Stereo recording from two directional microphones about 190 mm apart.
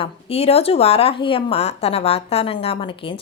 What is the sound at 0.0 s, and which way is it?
A woman's voice, 30° left (ahead or behind).